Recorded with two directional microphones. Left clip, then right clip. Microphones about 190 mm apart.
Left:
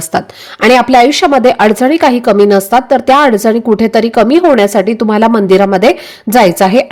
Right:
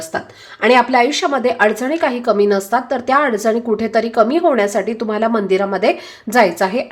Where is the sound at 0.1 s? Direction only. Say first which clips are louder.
Left 12 dB; 40° left (ahead or behind).